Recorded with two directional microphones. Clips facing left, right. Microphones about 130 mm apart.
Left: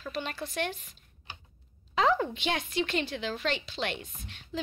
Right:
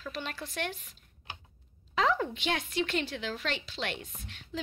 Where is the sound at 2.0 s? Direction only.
25° left (ahead or behind).